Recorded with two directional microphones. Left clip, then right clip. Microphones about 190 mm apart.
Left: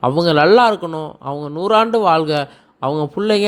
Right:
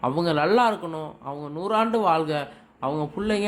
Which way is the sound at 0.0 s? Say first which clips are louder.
Left 9 dB; 35° left (ahead or behind).